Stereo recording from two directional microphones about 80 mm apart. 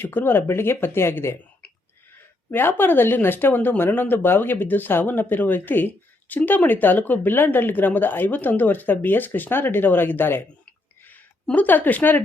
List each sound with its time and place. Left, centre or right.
0.0 s speech: left
2.5 s speech: left
11.5 s speech: left